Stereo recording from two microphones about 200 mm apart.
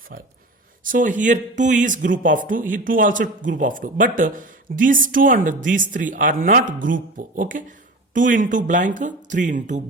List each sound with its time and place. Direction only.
0.9 s speech: 40° right (ahead or behind)